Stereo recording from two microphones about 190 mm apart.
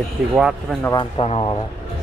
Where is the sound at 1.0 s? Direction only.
30° left (ahead or behind).